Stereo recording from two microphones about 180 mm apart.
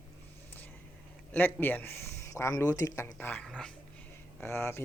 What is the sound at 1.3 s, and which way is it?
A man's voice, 10° left (ahead or behind).